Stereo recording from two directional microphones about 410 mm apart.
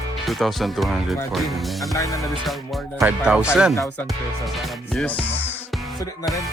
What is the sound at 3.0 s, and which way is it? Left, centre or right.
Music, centre.